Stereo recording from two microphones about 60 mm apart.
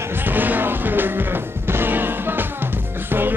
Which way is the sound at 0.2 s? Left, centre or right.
Right.